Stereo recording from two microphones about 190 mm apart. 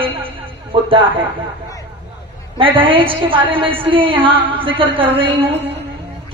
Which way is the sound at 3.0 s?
25° right (ahead or behind).